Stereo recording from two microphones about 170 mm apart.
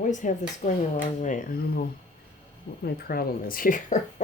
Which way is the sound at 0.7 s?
45° left (ahead or behind).